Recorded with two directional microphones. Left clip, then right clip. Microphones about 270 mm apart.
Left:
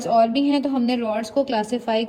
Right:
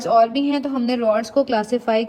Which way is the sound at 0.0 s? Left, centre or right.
Centre.